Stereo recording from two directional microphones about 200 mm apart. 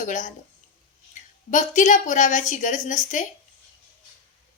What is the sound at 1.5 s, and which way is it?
A woman's voice, 40° left (ahead or behind).